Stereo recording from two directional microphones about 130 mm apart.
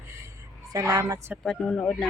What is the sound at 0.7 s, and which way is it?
Speech, 25° right (ahead or behind).